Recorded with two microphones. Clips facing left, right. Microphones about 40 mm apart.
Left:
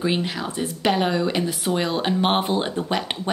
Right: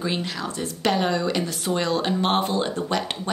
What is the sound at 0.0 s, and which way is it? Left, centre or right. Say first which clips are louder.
Speech: left 3 dB; centre.